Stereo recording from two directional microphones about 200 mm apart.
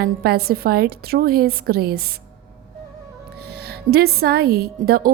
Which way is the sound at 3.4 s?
55° right (ahead or behind).